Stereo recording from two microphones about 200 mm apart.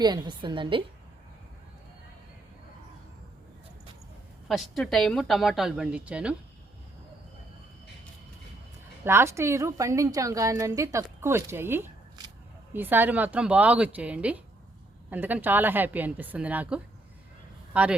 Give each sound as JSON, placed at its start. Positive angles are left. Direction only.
{"t": 0.0, "sound": "a woman's voice", "side_deg": -20}
{"t": 4.4, "sound": "a woman's voice", "side_deg": 0}
{"t": 9.0, "sound": "a woman's voice", "side_deg": -15}